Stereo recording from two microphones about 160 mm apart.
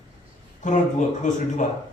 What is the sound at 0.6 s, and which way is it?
A man's voice, 50° left (ahead or behind).